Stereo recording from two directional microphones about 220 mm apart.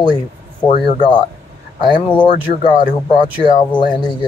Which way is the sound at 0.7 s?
20° left (ahead or behind).